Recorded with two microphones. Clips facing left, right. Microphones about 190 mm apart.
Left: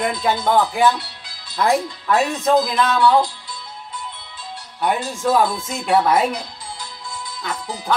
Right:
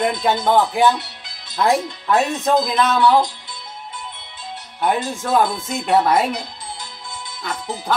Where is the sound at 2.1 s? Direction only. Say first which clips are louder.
Right 1 dB; 20° right (ahead or behind).